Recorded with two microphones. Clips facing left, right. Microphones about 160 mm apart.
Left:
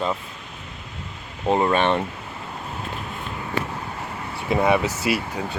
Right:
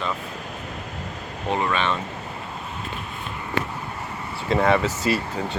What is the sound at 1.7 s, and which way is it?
Speech, 55° left (ahead or behind).